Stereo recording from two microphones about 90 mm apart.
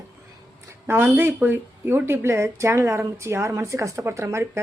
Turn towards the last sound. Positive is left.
turn(degrees=-30)  # may be behind; listen again after turning